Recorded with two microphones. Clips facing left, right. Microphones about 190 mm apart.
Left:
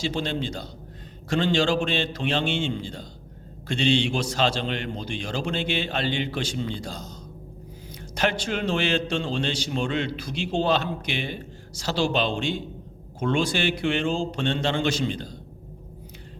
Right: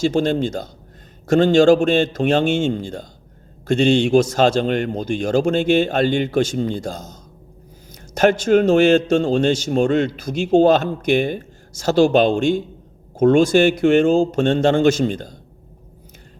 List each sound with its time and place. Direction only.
0.0 s a man's voice: 45° right (ahead or behind)